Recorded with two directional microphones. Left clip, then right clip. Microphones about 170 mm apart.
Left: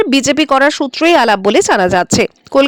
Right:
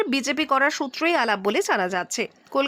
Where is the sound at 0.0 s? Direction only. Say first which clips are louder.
Left 12 dB; 40° left (ahead or behind).